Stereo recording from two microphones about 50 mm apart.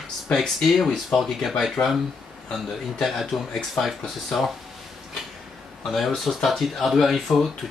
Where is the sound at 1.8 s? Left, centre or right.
Left.